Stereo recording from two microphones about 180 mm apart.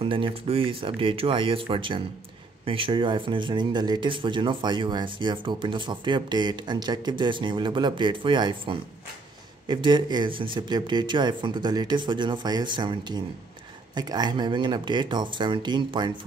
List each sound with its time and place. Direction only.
0.0 s speech: 30° right (ahead or behind)